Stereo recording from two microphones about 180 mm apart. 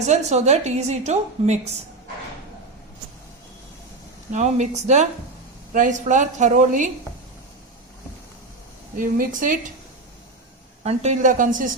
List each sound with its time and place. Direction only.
0.0 s a woman's voice: 40° right (ahead or behind)
4.3 s a woman's voice: 40° right (ahead or behind)
9.0 s a woman's voice: 50° right (ahead or behind)
10.8 s a woman's voice: 40° right (ahead or behind)